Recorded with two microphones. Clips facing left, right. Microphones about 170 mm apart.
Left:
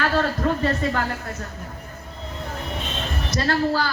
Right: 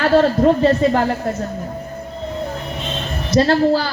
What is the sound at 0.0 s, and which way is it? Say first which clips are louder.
A man's voice: right 9 dB; 25° right (ahead or behind).